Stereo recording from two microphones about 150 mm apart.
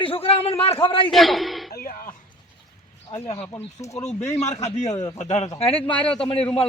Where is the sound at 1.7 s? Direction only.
80° left.